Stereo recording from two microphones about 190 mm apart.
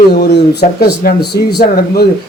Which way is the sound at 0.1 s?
55° left (ahead or behind).